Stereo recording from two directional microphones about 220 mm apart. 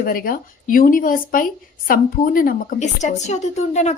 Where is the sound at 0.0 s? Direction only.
40° left (ahead or behind).